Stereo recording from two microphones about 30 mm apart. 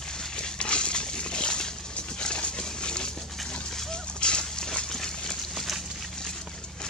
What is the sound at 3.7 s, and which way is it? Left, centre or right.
Splash, centre.